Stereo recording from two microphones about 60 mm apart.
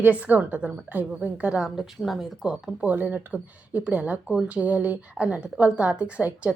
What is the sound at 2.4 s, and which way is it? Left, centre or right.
Speech, centre.